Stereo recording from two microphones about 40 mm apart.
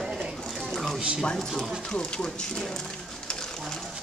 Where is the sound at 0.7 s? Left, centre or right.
Centre.